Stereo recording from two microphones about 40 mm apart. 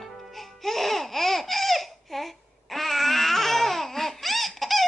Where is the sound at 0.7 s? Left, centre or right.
Centre.